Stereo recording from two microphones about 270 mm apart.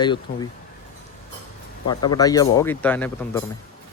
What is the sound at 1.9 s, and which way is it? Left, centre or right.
Speech, centre.